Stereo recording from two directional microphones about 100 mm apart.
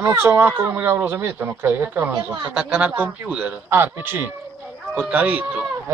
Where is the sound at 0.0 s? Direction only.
25° right (ahead or behind).